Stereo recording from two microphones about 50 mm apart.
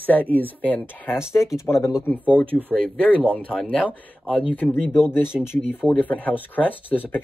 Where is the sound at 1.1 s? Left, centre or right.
Left.